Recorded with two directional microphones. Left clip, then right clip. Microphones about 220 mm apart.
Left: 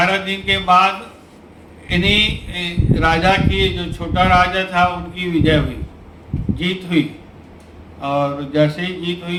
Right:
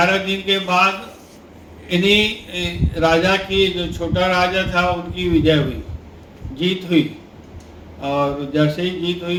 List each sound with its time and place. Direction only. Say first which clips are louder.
0.0 s a man's voice: even; 50° left (ahead or behind)
1.9 s a man's voice: even; 50° left (ahead or behind)
6.6 s a man's voice: right 2 dB; 50° left (ahead or behind)
8.0 s a man's voice: left 1 dB; 50° left (ahead or behind)